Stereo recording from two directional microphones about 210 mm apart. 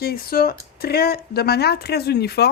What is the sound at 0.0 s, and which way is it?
Speech, 45° left (ahead or behind).